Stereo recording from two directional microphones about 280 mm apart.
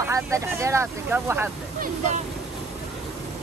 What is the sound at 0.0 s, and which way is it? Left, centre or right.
Speech, centre.